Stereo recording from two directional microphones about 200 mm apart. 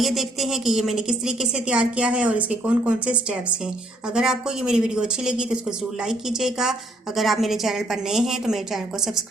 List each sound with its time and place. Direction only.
0.0 s a woman's voice: centre (ahead or behind)